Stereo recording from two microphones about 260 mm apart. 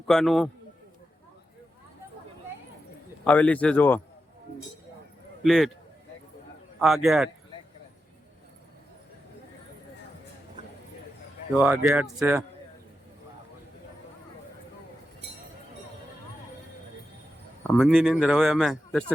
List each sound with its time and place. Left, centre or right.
0.1 s speech: centre
3.2 s speech: centre
5.4 s a man's voice: centre
6.7 s speech: centre
11.5 s speech: centre
17.7 s speech: centre